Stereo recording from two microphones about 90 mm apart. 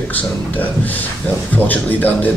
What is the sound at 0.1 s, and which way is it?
Speech, 20° left (ahead or behind).